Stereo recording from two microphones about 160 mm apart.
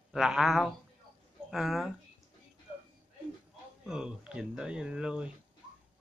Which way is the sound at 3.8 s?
5° right (ahead or behind).